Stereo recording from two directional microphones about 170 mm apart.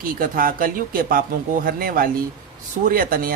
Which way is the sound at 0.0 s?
55° right (ahead or behind).